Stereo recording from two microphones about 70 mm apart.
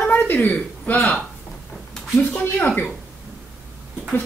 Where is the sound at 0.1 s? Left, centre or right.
Left.